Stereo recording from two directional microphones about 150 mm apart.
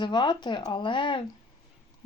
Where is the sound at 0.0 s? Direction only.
30° left (ahead or behind).